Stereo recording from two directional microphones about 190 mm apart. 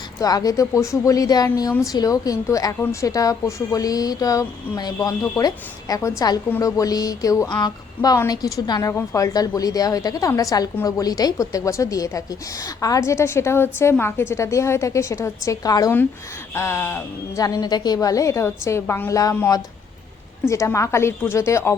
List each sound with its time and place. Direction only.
0.2 s a woman's voice: 20° left (ahead or behind)